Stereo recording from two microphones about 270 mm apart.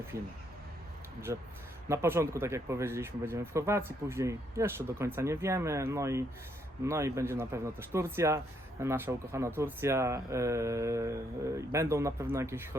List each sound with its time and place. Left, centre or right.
0.1 s speech: centre